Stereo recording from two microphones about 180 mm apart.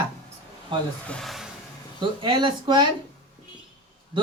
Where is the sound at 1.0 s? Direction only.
5° left (ahead or behind).